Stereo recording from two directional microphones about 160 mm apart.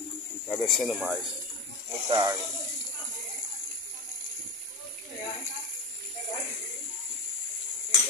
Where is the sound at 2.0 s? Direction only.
25° right (ahead or behind).